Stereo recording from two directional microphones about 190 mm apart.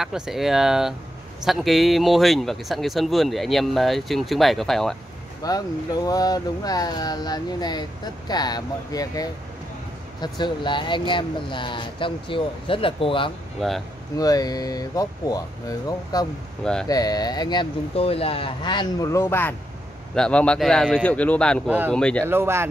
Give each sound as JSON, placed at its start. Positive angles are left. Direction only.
{"t": 0.0, "sound": "speech", "side_deg": 0}
{"t": 5.4, "sound": "speech", "side_deg": 20}
{"t": 13.6, "sound": "speech", "side_deg": 0}
{"t": 14.1, "sound": "speech", "side_deg": 20}
{"t": 21.6, "sound": "speech", "side_deg": -10}
{"t": 21.9, "sound": "speech", "side_deg": 5}
{"t": 22.3, "sound": "speech", "side_deg": -15}